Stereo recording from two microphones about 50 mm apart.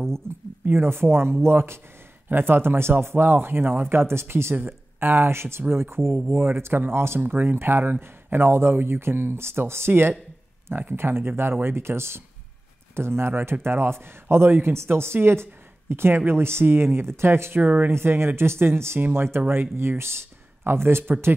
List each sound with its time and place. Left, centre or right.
0.7 s speech: right
4.6 s speech: right
7.2 s speech: right
17.6 s speech: right
17.9 s speech: right
18.9 s speech: right
19.2 s speech: right